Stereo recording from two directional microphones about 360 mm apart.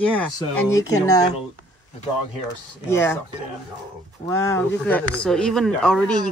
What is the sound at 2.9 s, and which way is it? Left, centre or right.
Speech, centre.